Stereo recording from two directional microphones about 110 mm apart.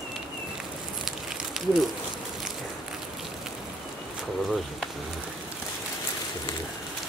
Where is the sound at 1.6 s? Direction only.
5° right (ahead or behind).